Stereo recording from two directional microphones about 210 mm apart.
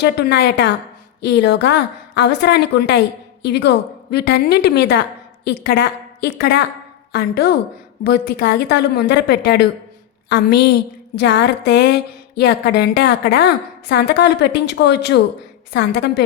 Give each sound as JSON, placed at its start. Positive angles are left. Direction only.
{"t": 0.0, "sound": "a woman's voice", "side_deg": 50}